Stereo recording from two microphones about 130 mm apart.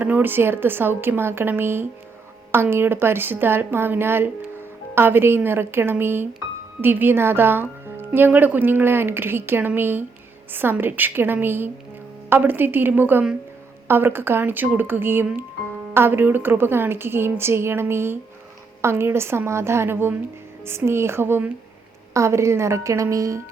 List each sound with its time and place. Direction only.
0.0 s a woman's voice: 15° right (ahead or behind)